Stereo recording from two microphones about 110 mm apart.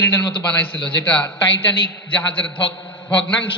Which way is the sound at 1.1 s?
10° left (ahead or behind).